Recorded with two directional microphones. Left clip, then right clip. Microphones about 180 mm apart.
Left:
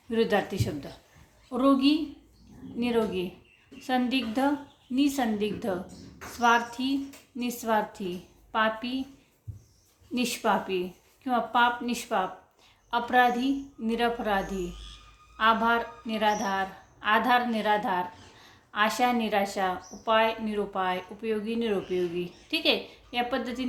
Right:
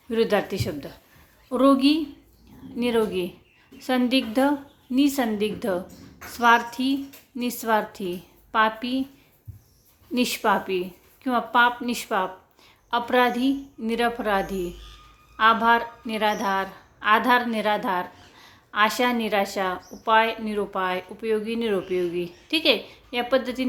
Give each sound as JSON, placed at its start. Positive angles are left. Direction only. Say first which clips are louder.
{"t": 0.1, "sound": "a woman's voice", "louder": "right 4 dB", "side_deg": -25}
{"t": 10.2, "sound": "a woman's voice", "louder": "right 4 dB", "side_deg": -30}